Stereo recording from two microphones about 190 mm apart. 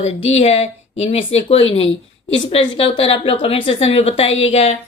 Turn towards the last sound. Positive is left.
turn(degrees=35)  # may be behind; listen again after turning